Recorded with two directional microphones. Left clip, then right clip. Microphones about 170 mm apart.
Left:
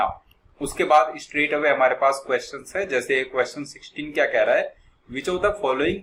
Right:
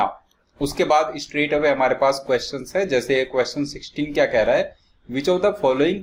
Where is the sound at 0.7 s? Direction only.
50° right (ahead or behind).